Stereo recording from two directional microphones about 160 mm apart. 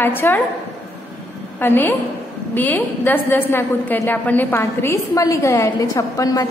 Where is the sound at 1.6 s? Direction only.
15° left (ahead or behind).